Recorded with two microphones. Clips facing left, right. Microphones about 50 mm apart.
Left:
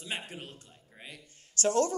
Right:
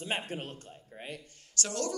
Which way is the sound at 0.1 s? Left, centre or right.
Right.